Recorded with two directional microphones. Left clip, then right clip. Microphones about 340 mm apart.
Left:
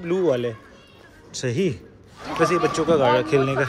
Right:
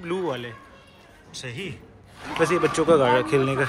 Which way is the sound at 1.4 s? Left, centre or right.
Left.